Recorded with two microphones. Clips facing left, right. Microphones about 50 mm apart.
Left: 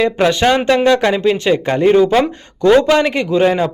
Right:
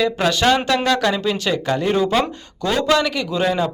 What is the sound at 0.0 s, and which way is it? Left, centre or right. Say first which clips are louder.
A man's voice: left 4 dB; left.